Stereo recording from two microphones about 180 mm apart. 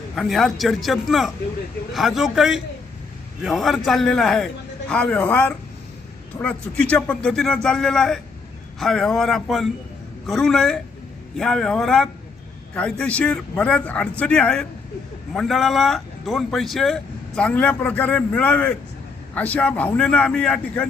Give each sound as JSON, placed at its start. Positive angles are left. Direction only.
{"t": 0.2, "sound": "a man's voice", "side_deg": 0}